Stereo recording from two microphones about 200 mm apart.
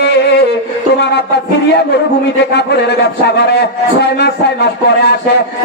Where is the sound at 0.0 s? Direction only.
55° left (ahead or behind).